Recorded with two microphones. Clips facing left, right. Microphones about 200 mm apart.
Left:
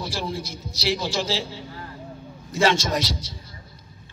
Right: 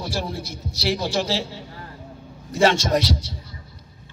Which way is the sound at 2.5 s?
60° right (ahead or behind).